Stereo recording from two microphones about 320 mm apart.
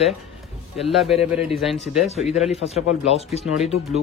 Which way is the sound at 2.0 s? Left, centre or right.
Centre.